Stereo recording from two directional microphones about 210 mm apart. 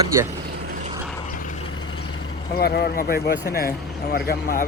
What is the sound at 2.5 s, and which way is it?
Speech, 45° left (ahead or behind).